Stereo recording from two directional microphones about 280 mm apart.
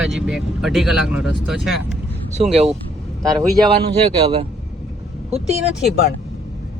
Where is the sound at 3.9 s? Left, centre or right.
Right.